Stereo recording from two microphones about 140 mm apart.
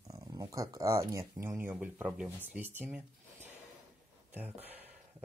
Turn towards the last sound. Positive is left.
turn(degrees=-15)  # may be behind; listen again after turning